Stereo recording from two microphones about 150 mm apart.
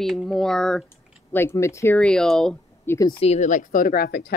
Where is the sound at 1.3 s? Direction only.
15° left (ahead or behind).